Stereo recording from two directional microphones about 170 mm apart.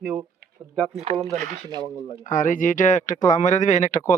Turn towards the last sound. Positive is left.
turn(degrees=45)  # may be behind; listen again after turning